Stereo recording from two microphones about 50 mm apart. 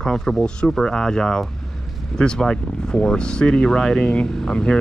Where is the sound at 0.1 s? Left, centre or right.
Centre.